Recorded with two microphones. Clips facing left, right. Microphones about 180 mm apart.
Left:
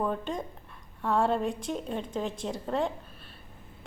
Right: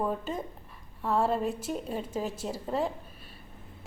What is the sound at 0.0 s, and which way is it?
A woman's voice, 5° right (ahead or behind).